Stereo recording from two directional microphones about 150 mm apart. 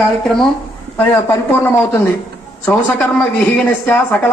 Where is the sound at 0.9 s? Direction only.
15° left (ahead or behind).